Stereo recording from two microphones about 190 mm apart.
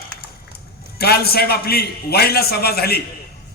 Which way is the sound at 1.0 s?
55° left (ahead or behind).